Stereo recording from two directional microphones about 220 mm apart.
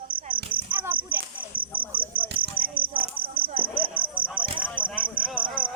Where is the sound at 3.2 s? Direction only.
25° right (ahead or behind).